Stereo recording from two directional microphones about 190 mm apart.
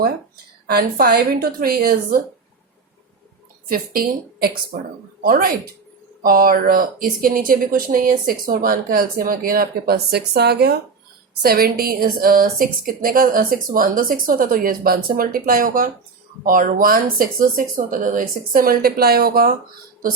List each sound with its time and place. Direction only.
0.7 s speech: 55° right (ahead or behind)
3.7 s speech: 55° right (ahead or behind)